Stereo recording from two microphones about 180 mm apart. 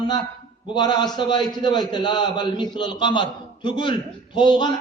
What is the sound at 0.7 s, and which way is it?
A man's voice, 25° left (ahead or behind).